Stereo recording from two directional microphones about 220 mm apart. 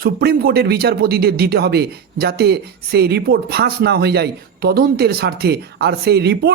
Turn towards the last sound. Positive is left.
turn(degrees=-45)  # may be behind; listen again after turning